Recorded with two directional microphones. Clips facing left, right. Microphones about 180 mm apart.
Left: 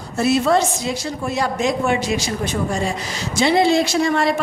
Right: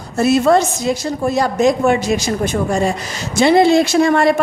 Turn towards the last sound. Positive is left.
turn(degrees=-55)  # may be behind; listen again after turning